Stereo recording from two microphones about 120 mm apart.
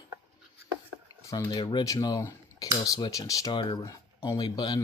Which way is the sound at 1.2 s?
30° left (ahead or behind).